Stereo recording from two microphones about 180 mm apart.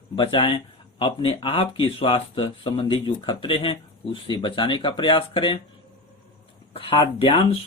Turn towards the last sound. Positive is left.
turn(degrees=30)  # may be behind; listen again after turning